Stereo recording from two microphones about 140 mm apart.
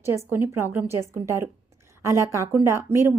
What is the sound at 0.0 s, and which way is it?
A woman's voice, 20° right (ahead or behind).